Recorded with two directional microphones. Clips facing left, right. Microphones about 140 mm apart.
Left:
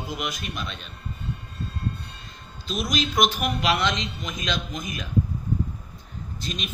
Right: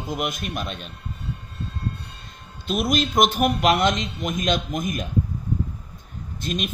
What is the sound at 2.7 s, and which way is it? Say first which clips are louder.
Speech: right 5 dB; 55° right (ahead or behind).